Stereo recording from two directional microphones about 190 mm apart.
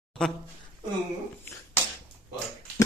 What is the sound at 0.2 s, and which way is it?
Speech, 5° left (ahead or behind).